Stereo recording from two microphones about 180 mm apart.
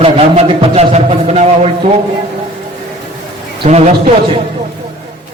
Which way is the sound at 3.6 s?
40° right (ahead or behind).